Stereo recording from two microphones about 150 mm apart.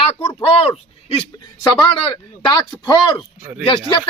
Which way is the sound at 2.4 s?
30° left (ahead or behind).